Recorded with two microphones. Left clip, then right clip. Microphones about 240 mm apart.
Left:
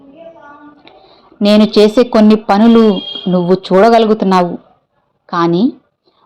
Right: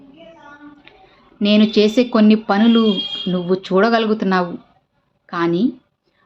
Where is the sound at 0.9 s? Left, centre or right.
Centre.